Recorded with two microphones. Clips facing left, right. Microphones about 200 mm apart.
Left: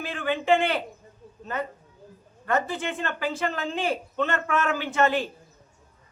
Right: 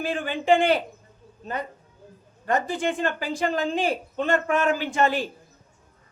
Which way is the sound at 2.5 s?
15° right (ahead or behind).